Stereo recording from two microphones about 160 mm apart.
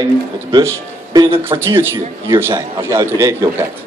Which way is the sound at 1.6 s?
15° right (ahead or behind).